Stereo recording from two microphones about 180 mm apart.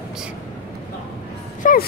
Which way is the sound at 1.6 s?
50° left (ahead or behind).